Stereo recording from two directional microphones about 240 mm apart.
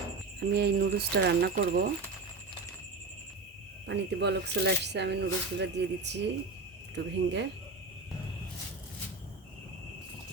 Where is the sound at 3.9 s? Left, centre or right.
Right.